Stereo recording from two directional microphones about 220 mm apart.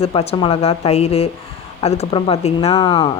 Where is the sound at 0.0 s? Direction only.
25° left (ahead or behind).